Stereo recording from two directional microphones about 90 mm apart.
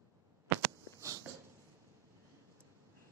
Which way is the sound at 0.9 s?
40° right (ahead or behind).